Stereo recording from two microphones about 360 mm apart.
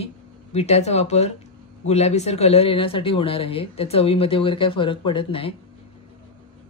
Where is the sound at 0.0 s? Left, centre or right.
Centre.